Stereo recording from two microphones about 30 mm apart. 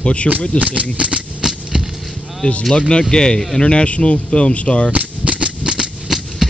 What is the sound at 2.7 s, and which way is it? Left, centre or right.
Speech, left.